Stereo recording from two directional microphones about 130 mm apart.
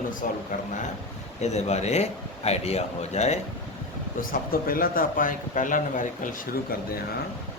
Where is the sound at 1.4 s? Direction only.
60° left (ahead or behind).